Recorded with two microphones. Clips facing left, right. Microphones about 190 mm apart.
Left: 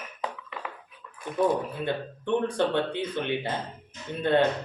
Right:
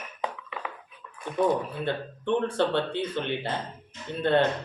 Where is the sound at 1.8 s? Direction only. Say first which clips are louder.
Even; 15° left (ahead or behind).